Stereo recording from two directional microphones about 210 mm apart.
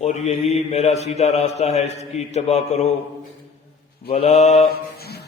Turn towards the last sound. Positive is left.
turn(degrees=50)  # may be behind; listen again after turning